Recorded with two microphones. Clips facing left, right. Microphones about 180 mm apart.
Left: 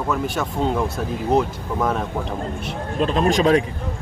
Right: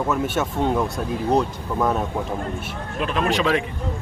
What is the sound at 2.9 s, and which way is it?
Speech, 35° left (ahead or behind).